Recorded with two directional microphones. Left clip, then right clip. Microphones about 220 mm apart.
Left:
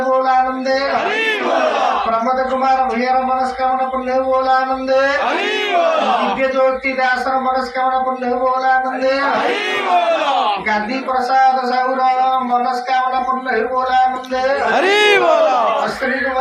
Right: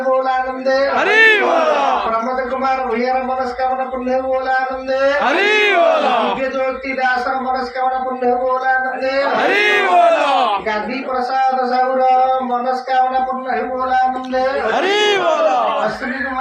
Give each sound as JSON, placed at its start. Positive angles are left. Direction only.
{"t": 1.1, "sound": "a sound", "side_deg": -40}
{"t": 5.4, "sound": "speech", "side_deg": -45}
{"t": 5.8, "sound": "battle cry", "side_deg": -15}
{"t": 14.8, "sound": "speech", "side_deg": 15}